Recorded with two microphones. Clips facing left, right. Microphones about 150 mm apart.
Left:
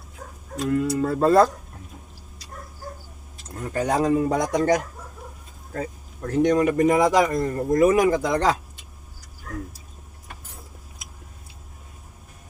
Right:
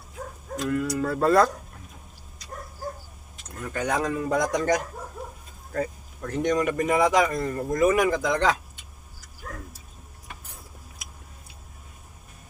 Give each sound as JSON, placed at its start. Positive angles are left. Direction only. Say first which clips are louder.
{"t": 0.6, "sound": "speech", "louder": "left 4 dB", "side_deg": 25}
{"t": 3.5, "sound": "speech", "louder": "left 4 dB", "side_deg": 30}
{"t": 6.2, "sound": "speech", "louder": "left 5 dB", "side_deg": 35}